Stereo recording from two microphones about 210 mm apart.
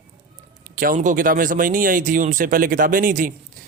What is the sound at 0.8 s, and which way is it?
A man's voice, 40° right (ahead or behind).